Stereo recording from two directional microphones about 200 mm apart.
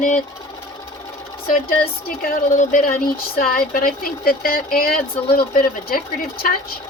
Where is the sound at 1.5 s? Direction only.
45° left (ahead or behind).